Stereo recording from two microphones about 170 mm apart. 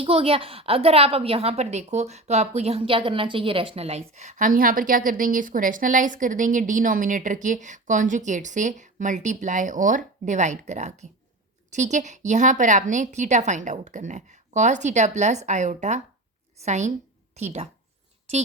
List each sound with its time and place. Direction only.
0.0 s a woman's voice: 35° right (ahead or behind)